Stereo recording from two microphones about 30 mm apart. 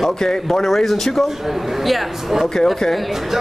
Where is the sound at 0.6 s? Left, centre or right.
Centre.